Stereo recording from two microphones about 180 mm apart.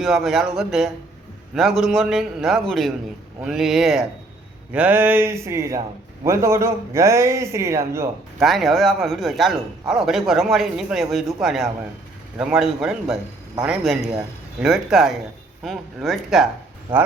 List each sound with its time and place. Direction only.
0.0 s a man's voice: centre (ahead or behind)
8.4 s speech: centre (ahead or behind)